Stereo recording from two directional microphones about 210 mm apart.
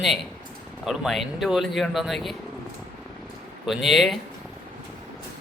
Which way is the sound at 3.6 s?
Centre (ahead or behind).